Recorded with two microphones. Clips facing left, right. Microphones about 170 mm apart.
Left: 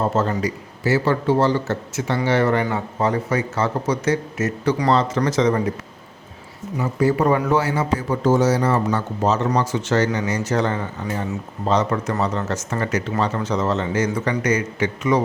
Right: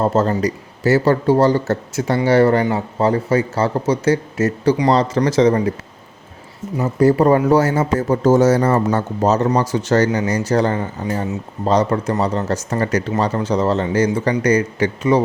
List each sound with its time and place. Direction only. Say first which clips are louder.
0.1 s speech: right 4 dB; 40° right (ahead or behind)
6.7 s speech: right 5 dB; 40° right (ahead or behind)